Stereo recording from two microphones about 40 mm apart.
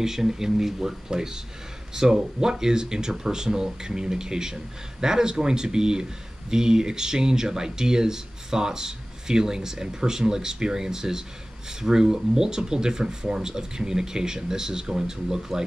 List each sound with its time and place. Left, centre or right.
0.0 s speech: centre